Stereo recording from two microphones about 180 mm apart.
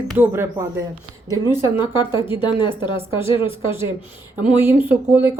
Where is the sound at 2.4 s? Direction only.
25° left (ahead or behind).